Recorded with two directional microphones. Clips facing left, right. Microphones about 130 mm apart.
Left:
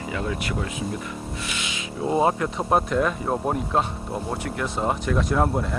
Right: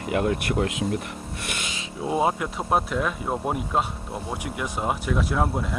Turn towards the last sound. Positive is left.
turn(degrees=-5)  # may be behind; listen again after turning